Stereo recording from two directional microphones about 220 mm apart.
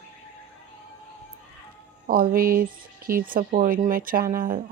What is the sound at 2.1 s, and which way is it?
Speech, 40° right (ahead or behind).